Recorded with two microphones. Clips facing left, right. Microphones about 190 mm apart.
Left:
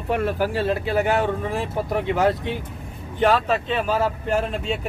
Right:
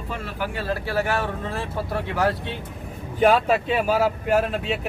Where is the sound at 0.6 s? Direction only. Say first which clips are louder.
Left 1 dB; 20° left (ahead or behind).